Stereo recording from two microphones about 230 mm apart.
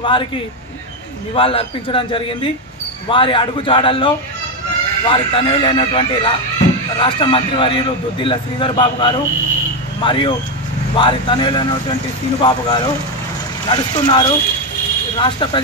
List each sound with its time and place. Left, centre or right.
0.0 s a man's voice: left
1.3 s a man's voice: left